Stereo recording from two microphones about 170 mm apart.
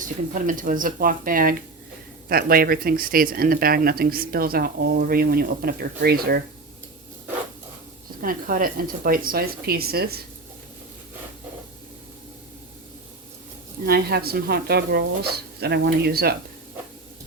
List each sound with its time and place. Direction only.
0.0 s speech: 50° right (ahead or behind)
8.2 s speech: 55° right (ahead or behind)
13.8 s speech: 65° right (ahead or behind)